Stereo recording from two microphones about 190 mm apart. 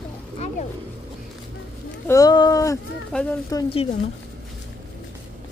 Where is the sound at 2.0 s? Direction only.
15° left (ahead or behind).